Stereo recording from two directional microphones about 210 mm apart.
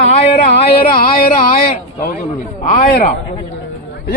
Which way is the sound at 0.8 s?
45° left (ahead or behind).